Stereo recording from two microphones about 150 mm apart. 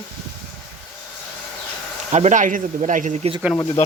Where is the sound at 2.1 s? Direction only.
50° right (ahead or behind).